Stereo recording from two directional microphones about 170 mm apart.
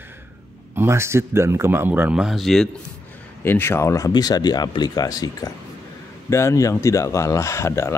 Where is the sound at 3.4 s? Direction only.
15° left (ahead or behind).